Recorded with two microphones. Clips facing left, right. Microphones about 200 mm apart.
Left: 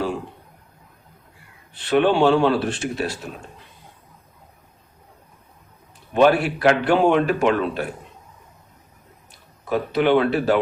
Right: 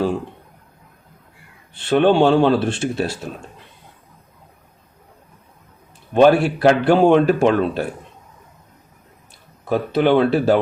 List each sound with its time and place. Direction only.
1.7 s speech: 25° right (ahead or behind)
6.1 s speech: 35° right (ahead or behind)
9.6 s speech: 30° right (ahead or behind)